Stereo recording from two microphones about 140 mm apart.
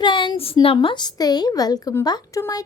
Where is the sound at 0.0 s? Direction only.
35° left (ahead or behind).